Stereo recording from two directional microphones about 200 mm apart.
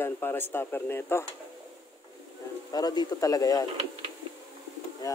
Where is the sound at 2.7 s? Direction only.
20° left (ahead or behind).